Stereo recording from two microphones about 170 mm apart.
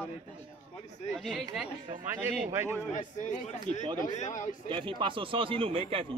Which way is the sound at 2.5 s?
15° right (ahead or behind).